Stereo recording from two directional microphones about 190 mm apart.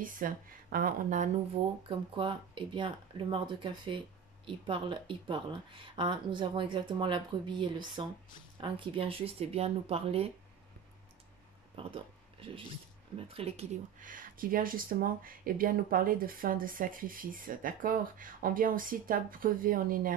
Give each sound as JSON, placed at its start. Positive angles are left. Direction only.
{"t": 0.0, "sound": "speech", "side_deg": -45}
{"t": 1.9, "sound": "speech", "side_deg": -25}
{"t": 11.7, "sound": "a sound", "side_deg": -30}
{"t": 13.3, "sound": "speech", "side_deg": -30}